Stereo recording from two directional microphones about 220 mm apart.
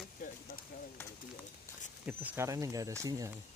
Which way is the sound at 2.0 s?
10° right (ahead or behind).